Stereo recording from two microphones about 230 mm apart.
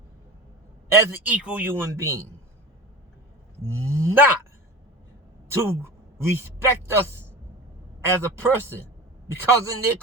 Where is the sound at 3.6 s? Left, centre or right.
Right.